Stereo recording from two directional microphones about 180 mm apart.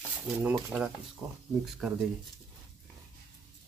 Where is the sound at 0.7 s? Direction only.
5° right (ahead or behind).